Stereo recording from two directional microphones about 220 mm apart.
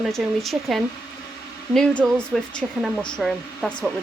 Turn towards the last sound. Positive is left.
turn(degrees=0)  # may be behind; listen again after turning